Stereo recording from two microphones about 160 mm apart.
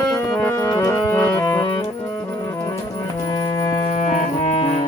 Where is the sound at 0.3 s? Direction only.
20° left (ahead or behind).